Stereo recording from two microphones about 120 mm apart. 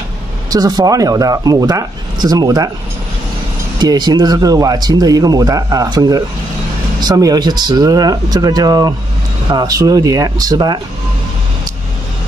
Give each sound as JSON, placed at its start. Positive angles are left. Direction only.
{"t": 0.5, "sound": "speech", "side_deg": -30}
{"t": 3.8, "sound": "speech", "side_deg": -35}